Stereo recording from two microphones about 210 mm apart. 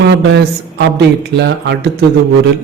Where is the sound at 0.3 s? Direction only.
55° right (ahead or behind).